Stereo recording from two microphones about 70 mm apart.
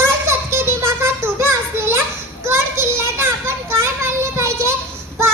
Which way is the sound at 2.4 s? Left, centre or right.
Right.